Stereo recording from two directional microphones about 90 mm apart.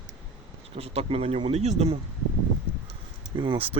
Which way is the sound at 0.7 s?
90° right.